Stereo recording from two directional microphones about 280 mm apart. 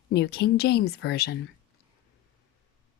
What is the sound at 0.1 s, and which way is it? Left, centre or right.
Speech, left.